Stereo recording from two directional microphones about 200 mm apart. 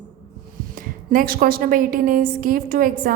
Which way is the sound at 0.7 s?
45° right (ahead or behind).